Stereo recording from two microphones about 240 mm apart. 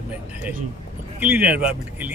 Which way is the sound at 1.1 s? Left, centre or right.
Centre.